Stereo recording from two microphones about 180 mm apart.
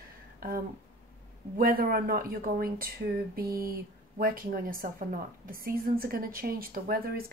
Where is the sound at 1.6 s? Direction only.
55° right (ahead or behind).